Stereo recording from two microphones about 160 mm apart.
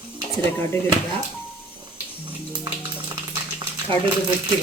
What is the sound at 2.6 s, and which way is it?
Music, 30° right (ahead or behind).